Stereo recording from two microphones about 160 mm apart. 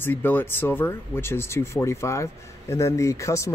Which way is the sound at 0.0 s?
10° left (ahead or behind).